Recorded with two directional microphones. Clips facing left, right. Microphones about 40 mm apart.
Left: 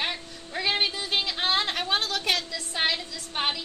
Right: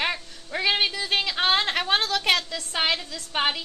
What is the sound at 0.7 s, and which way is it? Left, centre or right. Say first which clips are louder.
Speech: right 3 dB; right.